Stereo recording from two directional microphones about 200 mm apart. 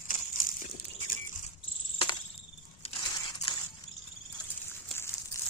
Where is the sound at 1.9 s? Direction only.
20° left (ahead or behind).